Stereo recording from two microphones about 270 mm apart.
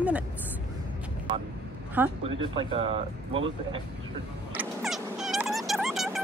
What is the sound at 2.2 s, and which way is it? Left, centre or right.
Speech, centre.